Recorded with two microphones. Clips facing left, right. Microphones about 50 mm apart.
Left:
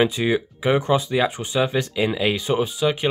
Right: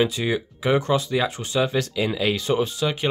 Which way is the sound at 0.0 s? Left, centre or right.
Left.